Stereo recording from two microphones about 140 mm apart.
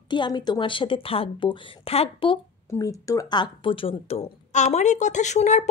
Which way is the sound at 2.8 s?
25° left (ahead or behind).